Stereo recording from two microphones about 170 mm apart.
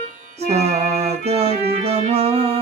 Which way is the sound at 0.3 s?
40° right (ahead or behind).